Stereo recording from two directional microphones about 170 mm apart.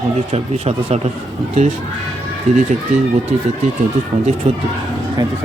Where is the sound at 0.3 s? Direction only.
40° right (ahead or behind).